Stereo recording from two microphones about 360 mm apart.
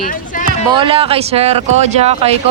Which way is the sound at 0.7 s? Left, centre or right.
Centre.